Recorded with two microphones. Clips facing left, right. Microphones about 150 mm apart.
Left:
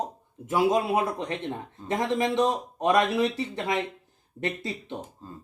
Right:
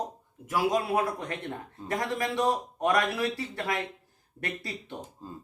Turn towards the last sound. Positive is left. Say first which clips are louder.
# left 5 dB
turn(degrees=20)  # may be behind; listen again after turning